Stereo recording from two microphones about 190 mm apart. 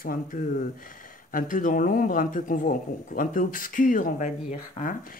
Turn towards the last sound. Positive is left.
turn(degrees=45)  # may be behind; listen again after turning